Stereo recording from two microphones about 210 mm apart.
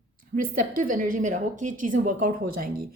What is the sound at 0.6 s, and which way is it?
A woman's voice, 40° right (ahead or behind).